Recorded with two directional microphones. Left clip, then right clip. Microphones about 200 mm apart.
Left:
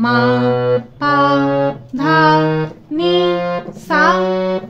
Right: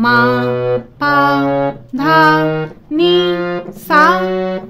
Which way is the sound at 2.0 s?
40° right (ahead or behind).